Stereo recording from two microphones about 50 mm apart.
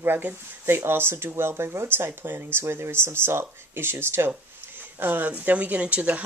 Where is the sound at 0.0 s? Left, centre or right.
Right.